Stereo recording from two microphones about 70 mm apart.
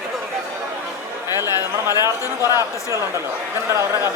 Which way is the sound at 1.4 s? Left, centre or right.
Left.